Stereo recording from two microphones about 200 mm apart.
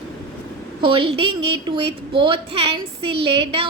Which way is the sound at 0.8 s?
25° right (ahead or behind).